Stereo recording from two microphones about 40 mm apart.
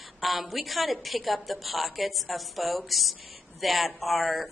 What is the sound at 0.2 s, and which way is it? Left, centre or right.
Speech, centre.